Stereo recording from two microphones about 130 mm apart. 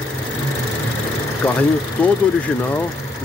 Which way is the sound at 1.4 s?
10° left (ahead or behind).